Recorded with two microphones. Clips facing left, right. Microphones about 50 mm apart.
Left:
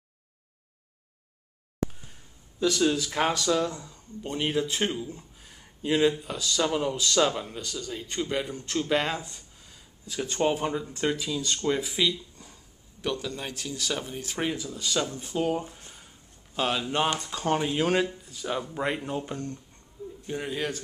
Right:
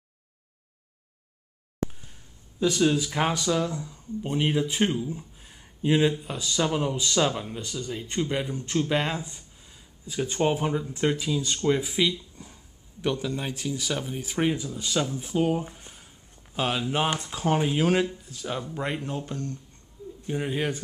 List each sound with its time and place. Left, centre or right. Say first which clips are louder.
2.8 s speech: right 2 dB; centre
7.5 s speech: right 2 dB; centre
15.9 s a sound: even; centre
17.2 s speech: right 2 dB; centre
20.2 s speech: right 3 dB; centre